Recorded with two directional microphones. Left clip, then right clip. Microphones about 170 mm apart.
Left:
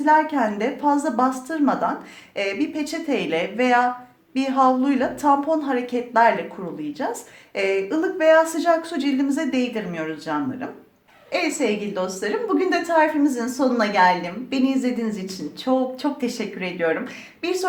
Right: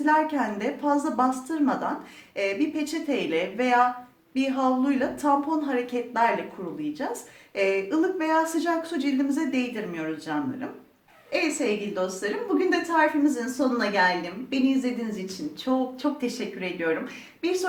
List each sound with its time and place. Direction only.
0.0 s a woman's voice: 40° left (ahead or behind)